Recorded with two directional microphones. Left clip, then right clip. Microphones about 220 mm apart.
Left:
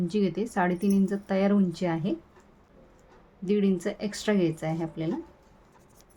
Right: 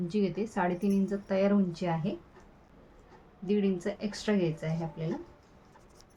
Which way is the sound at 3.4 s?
45° left (ahead or behind).